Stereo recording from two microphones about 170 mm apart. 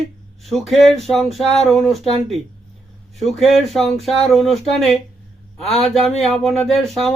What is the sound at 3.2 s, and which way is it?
Speech, centre (ahead or behind).